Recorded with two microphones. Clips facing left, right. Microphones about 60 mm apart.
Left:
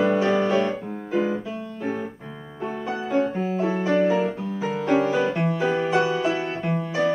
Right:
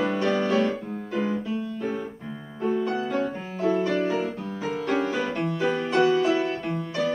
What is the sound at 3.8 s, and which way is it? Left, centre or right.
Piano, centre.